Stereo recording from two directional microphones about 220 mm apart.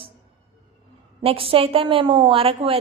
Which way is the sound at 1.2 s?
25° right (ahead or behind).